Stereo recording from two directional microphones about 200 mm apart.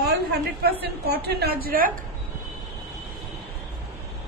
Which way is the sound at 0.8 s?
55° right (ahead or behind).